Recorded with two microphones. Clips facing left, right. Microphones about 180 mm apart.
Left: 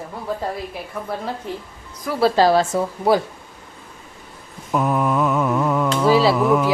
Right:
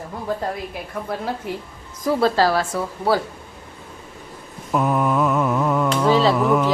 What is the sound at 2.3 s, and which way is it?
Speech, 20° left (ahead or behind).